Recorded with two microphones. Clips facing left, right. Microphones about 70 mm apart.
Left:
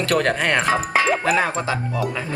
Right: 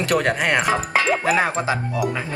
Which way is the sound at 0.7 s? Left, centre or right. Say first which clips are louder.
Left 1 dB; centre.